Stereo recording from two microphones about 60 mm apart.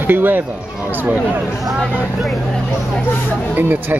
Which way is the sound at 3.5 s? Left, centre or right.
Right.